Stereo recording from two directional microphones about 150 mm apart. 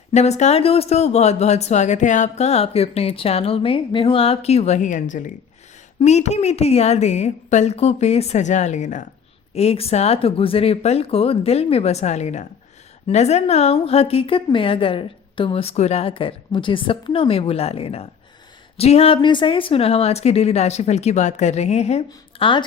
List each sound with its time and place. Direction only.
0.1 s speech: 50° left (ahead or behind)
6.0 s speech: 45° left (ahead or behind)
9.6 s a woman's voice: 40° left (ahead or behind)